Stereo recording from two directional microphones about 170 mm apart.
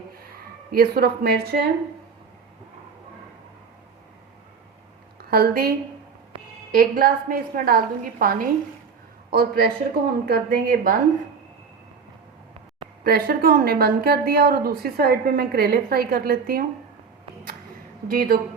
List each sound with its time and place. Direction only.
0.7 s a woman's voice: 65° right (ahead or behind)
5.3 s a woman's voice: 65° right (ahead or behind)
13.1 s a woman's voice: 65° right (ahead or behind)
18.1 s a woman's voice: 55° right (ahead or behind)